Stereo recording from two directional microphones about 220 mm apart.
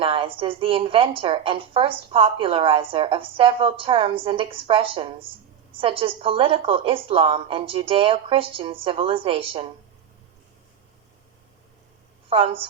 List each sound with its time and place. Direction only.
0.0 s a woman's voice: 25° right (ahead or behind)
12.3 s a woman's voice: 25° right (ahead or behind)